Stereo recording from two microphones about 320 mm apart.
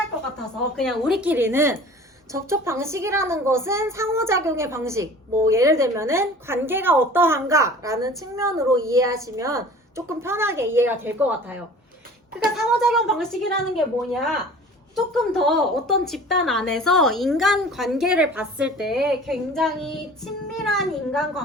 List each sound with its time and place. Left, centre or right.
0.8 s a woman's voice: centre